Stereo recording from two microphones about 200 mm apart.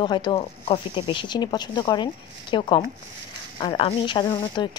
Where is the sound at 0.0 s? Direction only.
20° left (ahead or behind).